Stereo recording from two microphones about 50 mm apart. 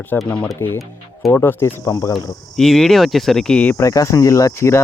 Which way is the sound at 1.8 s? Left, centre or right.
Left.